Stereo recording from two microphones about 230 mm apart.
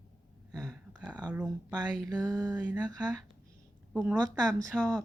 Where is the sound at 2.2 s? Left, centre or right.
Centre.